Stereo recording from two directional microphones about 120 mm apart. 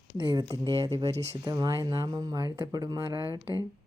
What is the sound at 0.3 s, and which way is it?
Speech, 30° right (ahead or behind).